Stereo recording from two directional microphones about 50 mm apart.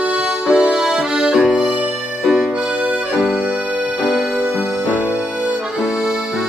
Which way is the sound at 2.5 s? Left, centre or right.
Right.